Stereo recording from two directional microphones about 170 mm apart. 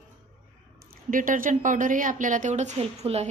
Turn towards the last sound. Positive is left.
turn(degrees=-35)  # may be behind; listen again after turning